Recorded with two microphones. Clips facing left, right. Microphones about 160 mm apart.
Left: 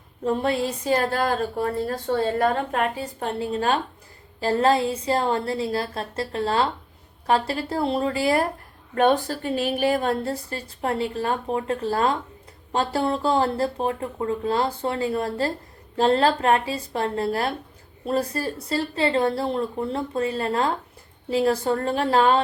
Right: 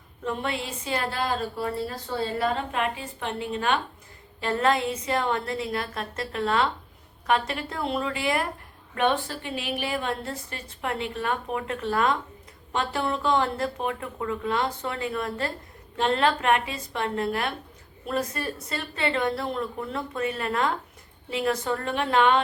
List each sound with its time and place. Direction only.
0.3 s a woman's voice: 35° left (ahead or behind)